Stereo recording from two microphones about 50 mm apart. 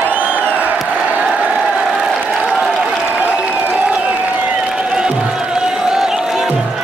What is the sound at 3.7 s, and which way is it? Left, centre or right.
Music, right.